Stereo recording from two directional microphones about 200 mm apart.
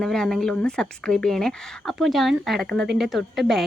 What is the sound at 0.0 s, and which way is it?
Speech, centre (ahead or behind).